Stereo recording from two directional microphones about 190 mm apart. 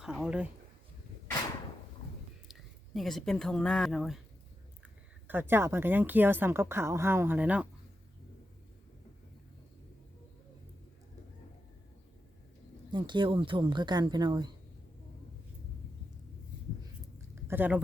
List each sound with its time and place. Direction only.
0.0 s speech: 5° right (ahead or behind)
2.5 s speech: centre (ahead or behind)
5.3 s a woman's voice: 10° right (ahead or behind)
12.9 s speech: 25° right (ahead or behind)
17.3 s a sound: 10° right (ahead or behind)